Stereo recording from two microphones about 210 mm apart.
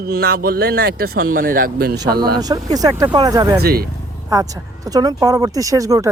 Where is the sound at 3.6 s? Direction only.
45° right (ahead or behind).